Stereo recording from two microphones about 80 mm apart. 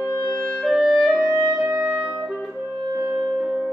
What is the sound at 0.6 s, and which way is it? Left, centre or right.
Clarinet, centre.